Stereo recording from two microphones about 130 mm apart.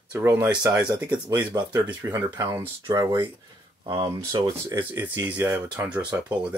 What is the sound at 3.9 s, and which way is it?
Speech, 35° right (ahead or behind).